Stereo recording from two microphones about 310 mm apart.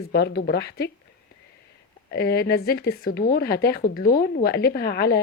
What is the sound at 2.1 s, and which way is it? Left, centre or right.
A woman's voice, left.